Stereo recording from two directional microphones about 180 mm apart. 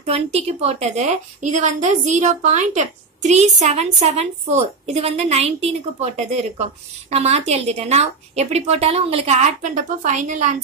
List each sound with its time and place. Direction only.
0.0 s a woman's voice: 35° right (ahead or behind)